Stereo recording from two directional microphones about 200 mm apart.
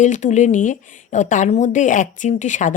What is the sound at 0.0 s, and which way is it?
A woman's voice, 35° left (ahead or behind).